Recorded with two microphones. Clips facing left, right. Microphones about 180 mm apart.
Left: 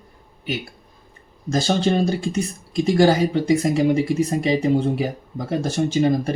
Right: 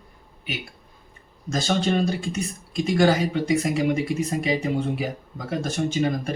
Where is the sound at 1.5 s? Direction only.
30° left (ahead or behind).